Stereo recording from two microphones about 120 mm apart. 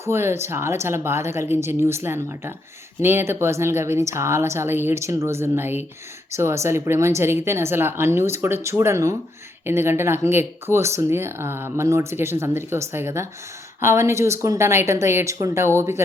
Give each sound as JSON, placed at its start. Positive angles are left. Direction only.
{"t": 0.0, "sound": "speech", "side_deg": -20}